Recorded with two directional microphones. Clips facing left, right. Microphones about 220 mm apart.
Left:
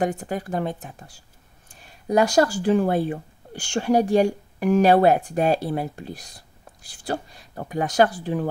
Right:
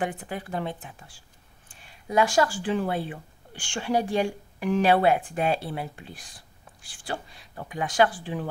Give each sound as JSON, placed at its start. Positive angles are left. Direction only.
{"t": 0.0, "sound": "speech", "side_deg": 45}